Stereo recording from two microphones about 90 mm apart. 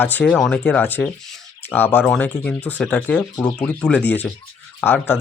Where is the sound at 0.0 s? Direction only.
20° left (ahead or behind).